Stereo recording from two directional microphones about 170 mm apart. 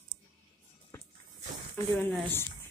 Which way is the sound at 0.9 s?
15° left (ahead or behind).